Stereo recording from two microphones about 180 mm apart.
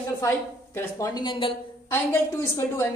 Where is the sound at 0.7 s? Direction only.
20° left (ahead or behind).